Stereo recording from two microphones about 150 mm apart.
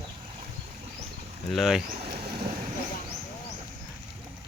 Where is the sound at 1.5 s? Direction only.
Centre (ahead or behind).